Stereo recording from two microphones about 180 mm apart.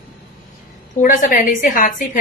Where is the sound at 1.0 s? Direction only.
50° left (ahead or behind).